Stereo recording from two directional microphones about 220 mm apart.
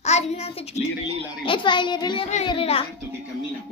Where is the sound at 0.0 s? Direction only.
30° left (ahead or behind).